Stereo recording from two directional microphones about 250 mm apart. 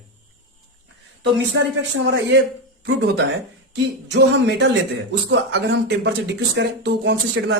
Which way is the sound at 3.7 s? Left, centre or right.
Right.